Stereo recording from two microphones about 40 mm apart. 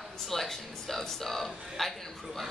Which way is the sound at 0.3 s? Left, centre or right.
Centre.